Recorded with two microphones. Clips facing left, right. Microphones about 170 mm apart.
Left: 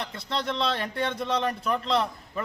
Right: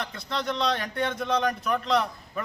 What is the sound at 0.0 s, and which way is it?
A man's voice, 30° left (ahead or behind).